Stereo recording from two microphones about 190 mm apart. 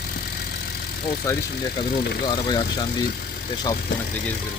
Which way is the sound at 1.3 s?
15° left (ahead or behind).